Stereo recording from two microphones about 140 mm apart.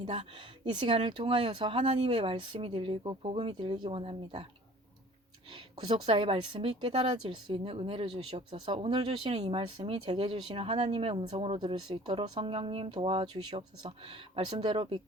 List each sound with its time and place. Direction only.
0.0 s speech: 40° right (ahead or behind)
5.9 s speech: 40° right (ahead or behind)
14.1 s speech: 45° right (ahead or behind)